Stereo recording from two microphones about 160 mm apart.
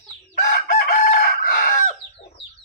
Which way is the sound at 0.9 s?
70° left (ahead or behind).